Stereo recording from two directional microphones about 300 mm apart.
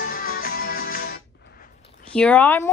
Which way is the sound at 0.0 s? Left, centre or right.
Left.